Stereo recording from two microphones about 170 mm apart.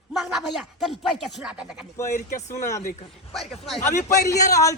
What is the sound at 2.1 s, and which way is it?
Speech, 50° left (ahead or behind).